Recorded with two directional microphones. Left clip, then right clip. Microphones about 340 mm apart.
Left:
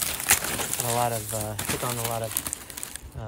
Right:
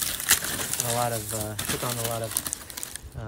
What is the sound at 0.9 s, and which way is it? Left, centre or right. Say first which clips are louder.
Speech: left 2 dB; centre.